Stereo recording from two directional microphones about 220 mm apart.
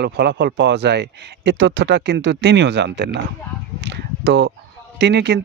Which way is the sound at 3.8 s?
50° right (ahead or behind).